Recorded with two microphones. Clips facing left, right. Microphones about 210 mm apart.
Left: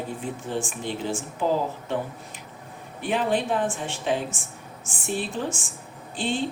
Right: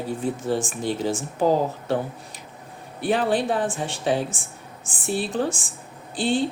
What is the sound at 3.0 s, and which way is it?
A woman's voice, 35° right (ahead or behind).